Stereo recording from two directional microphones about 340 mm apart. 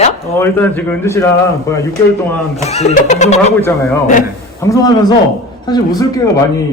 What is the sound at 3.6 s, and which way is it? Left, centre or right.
A man's voice, centre.